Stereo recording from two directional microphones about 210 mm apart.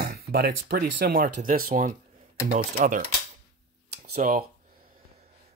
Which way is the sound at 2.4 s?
30° right (ahead or behind).